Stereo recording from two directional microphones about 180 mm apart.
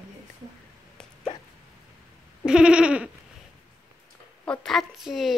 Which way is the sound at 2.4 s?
5° right (ahead or behind).